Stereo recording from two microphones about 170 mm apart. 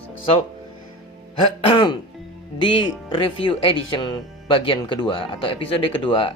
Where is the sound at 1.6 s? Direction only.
25° left (ahead or behind).